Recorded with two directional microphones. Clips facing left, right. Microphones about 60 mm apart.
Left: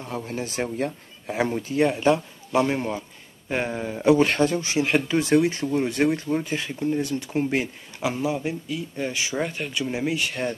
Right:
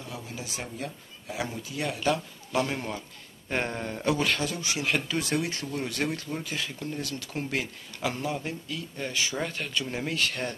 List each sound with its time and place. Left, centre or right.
0.1 s speech: left
3.4 s speech: centre
4.2 s speech: left; by 10.5 s centre